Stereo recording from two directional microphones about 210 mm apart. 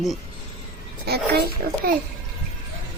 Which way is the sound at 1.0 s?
50° right (ahead or behind).